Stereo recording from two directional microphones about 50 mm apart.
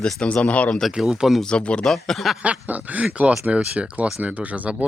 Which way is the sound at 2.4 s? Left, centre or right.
Right.